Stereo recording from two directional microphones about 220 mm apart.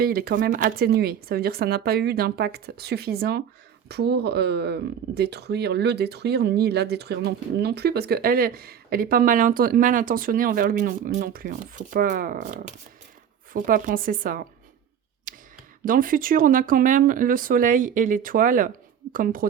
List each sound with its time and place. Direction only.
0.0 s speech: 45° right (ahead or behind)
15.3 s tick: 40° right (ahead or behind)
15.8 s speech: 40° right (ahead or behind)